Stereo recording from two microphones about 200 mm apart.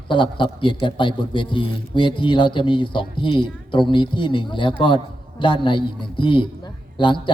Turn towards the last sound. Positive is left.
turn(degrees=25)  # may be behind; listen again after turning